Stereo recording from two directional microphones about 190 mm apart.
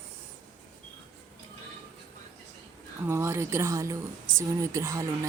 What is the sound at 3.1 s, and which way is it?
A woman's voice, 15° right (ahead or behind).